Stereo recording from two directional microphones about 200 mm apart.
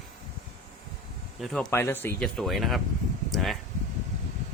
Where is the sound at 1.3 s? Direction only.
Centre (ahead or behind).